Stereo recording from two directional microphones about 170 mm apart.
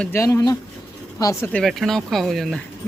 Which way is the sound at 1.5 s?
Centre (ahead or behind).